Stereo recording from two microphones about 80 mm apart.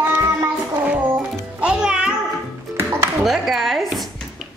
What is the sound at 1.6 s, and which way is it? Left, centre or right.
Music, centre.